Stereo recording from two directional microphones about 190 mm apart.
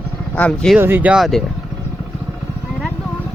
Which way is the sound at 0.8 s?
10° right (ahead or behind).